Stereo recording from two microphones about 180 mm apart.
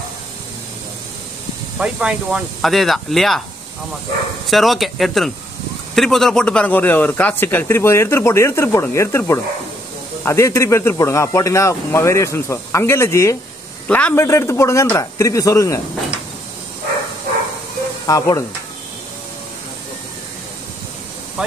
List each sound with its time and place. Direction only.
1.8 s speech: 5° right (ahead or behind)
4.5 s a man's voice: centre (ahead or behind); by 15.8 s 20° left (ahead or behind)
18.0 s speech: 20° left (ahead or behind)